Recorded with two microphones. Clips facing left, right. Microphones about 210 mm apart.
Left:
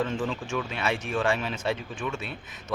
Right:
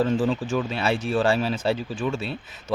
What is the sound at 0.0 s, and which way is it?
Speech, 35° right (ahead or behind).